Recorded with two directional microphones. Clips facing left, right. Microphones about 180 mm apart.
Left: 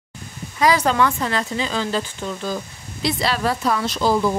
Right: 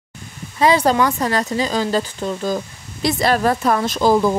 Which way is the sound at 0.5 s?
30° right (ahead or behind).